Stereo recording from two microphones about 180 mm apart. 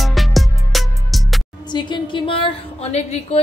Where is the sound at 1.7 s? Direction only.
25° left (ahead or behind).